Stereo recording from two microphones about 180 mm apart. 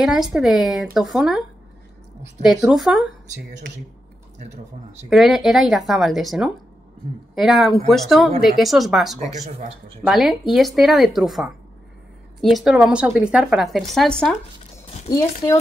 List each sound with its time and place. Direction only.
0.0 s a woman's voice: 5° right (ahead or behind)
2.4 s a woman's voice: centre (ahead or behind)
5.1 s a woman's voice: centre (ahead or behind)
15.0 s speech: 15° left (ahead or behind)